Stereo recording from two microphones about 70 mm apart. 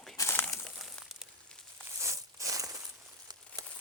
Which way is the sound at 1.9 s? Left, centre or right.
Right.